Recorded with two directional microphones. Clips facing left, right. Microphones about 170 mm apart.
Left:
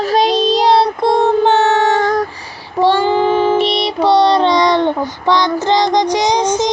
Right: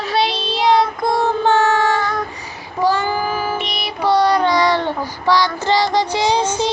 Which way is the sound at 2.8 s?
30° left (ahead or behind).